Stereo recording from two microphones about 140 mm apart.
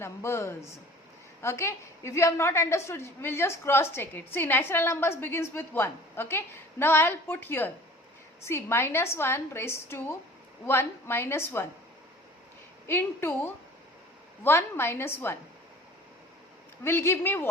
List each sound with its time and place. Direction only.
0.0 s a woman's voice: 20° left (ahead or behind)
12.9 s a woman's voice: 15° left (ahead or behind)
16.8 s a woman's voice: 15° left (ahead or behind)